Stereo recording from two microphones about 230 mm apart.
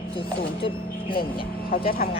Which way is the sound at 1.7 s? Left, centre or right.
Left.